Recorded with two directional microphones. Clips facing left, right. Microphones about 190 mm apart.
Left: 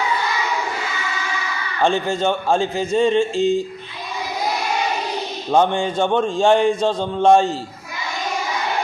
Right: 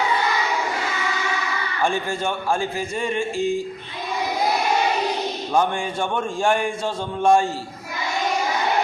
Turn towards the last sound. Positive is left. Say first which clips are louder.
# left 4 dB
turn(degrees=20)  # may be behind; listen again after turning